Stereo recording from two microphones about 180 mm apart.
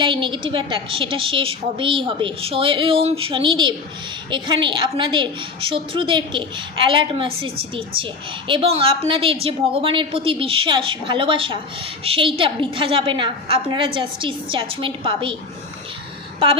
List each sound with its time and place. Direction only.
0.0 s a woman's voice: 25° right (ahead or behind)